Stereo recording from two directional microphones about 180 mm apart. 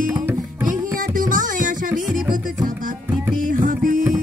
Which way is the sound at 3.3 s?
50° right (ahead or behind).